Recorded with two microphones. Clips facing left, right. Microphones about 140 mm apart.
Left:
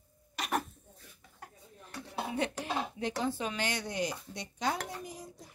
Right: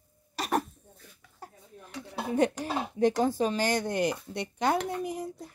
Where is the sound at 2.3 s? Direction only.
45° right (ahead or behind); by 5.5 s 65° right (ahead or behind).